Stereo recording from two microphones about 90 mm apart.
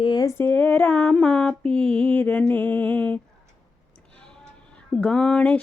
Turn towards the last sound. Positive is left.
turn(degrees=10)  # may be behind; listen again after turning